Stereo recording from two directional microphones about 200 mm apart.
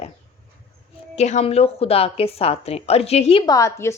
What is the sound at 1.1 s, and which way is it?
A woman's voice, 35° left (ahead or behind).